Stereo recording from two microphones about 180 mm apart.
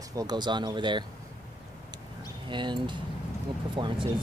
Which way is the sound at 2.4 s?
25° right (ahead or behind).